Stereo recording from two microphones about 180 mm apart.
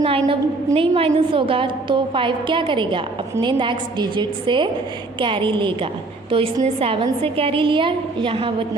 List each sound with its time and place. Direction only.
0.0 s a woman's voice: 30° right (ahead or behind)